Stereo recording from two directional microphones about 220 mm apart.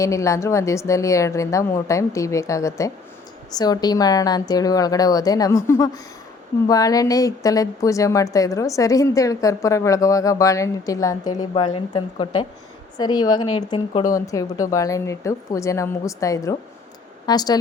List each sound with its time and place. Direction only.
0.0 s a woman's voice: 15° left (ahead or behind)